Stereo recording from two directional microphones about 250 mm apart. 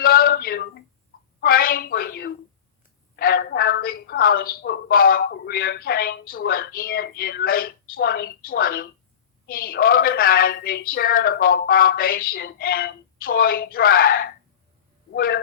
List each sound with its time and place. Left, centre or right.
0.0 s male singing: left
1.4 s a woman's voice: left